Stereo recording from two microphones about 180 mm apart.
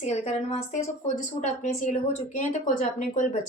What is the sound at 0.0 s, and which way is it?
Speech, 40° left (ahead or behind).